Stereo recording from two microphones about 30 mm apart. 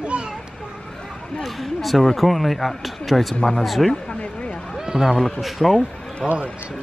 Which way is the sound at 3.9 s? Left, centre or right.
Left.